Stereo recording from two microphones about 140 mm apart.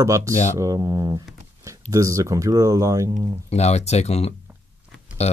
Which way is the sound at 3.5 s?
50° left (ahead or behind).